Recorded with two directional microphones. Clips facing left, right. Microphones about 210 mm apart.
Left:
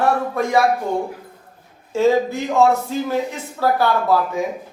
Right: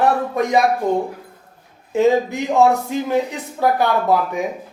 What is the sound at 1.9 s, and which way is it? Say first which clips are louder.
A man's voice: right 1 dB; 15° right (ahead or behind).